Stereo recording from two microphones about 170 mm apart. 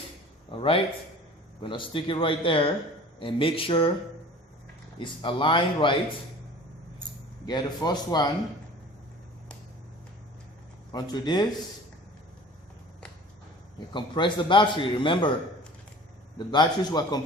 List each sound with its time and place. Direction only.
0.5 s a man's voice: 30° left (ahead or behind)
4.9 s a man's voice: 30° left (ahead or behind)
7.4 s a man's voice: 25° left (ahead or behind)
10.9 s a man's voice: 25° left (ahead or behind)
13.7 s a man's voice: 30° left (ahead or behind)
16.5 s a man's voice: 25° left (ahead or behind)